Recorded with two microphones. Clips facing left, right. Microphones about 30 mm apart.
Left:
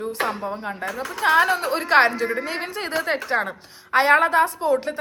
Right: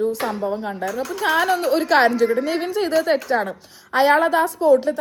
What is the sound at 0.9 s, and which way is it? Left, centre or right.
Speech, left.